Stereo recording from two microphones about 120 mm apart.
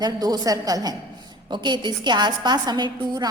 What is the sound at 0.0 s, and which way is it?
A woman's voice, 30° right (ahead or behind).